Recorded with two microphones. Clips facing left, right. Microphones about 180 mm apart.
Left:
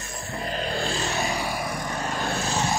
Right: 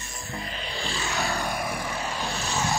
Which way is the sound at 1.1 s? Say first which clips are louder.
Left 1 dB; 20° left (ahead or behind).